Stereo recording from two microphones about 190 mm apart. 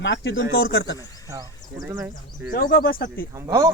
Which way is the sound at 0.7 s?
65° left (ahead or behind).